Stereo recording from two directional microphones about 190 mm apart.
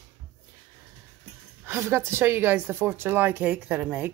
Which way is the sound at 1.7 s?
10° right (ahead or behind).